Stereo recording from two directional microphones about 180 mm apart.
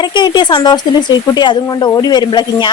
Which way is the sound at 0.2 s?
25° left (ahead or behind).